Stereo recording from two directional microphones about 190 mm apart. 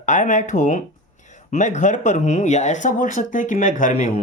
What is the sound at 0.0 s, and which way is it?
Speech, 40° left (ahead or behind).